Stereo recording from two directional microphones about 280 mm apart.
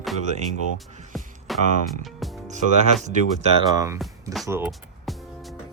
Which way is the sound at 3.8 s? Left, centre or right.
Centre.